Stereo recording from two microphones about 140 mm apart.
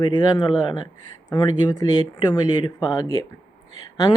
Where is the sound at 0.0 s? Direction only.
30° left (ahead or behind).